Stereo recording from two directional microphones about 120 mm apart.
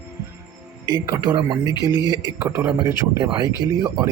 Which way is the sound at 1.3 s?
40° right (ahead or behind).